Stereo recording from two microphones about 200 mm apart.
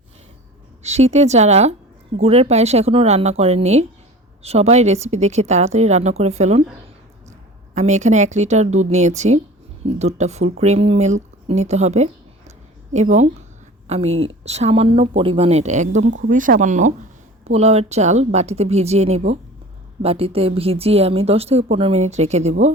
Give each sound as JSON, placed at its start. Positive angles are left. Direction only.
{"t": 0.8, "sound": "a woman's voice", "side_deg": -35}
{"t": 14.1, "sound": "a woman's voice", "side_deg": -80}
{"t": 14.4, "sound": "speech", "side_deg": -30}